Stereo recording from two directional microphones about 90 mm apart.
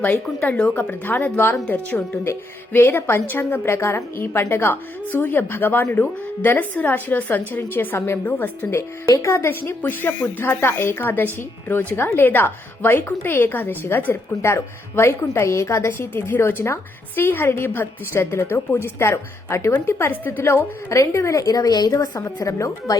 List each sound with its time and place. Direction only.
0.0 s speech: 20° left (ahead or behind)
0.7 s speech: 25° left (ahead or behind)
9.0 s speech: 35° left (ahead or behind)